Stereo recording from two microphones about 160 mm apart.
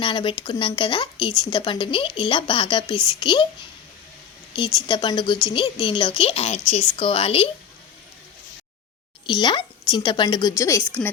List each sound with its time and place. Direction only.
0.0 s speech: 30° left (ahead or behind)
4.5 s speech: 30° left (ahead or behind)
9.2 s speech: 30° left (ahead or behind)